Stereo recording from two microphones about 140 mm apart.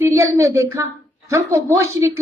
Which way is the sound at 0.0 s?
20° right (ahead or behind).